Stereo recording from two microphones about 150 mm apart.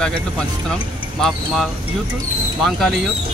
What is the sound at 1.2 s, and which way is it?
Speech, centre (ahead or behind).